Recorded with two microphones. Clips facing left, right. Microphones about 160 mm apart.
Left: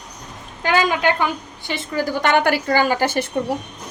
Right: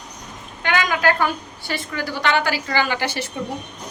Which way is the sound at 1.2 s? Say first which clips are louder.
Even; 20° left (ahead or behind).